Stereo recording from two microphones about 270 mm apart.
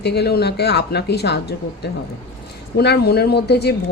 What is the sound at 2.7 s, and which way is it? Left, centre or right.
A woman's voice, left.